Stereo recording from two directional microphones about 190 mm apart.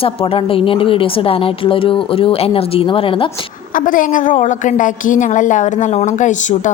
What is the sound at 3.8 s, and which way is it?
A woman's voice, 45° left (ahead or behind).